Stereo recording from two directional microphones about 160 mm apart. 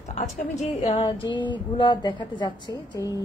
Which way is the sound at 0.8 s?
35° left (ahead or behind).